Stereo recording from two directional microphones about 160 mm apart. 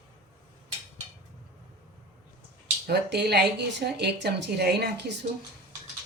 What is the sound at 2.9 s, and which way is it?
Speech, 90° right.